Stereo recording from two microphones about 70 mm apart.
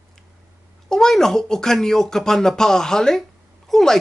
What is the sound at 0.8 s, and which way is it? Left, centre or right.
Speech, centre.